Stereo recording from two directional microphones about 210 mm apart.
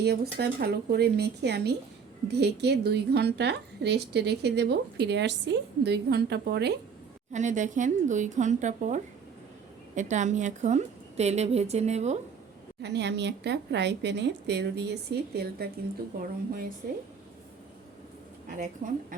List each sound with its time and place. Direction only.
0.0 s a woman's voice: 50° right (ahead or behind)
7.3 s a woman's voice: 35° right (ahead or behind)
12.8 s a woman's voice: 55° right (ahead or behind)
18.4 s a woman's voice: 40° right (ahead or behind)